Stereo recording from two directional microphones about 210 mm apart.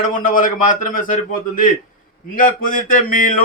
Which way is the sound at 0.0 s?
40° left (ahead or behind).